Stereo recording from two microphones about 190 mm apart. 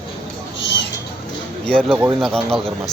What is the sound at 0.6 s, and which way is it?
Mouse, 65° left (ahead or behind).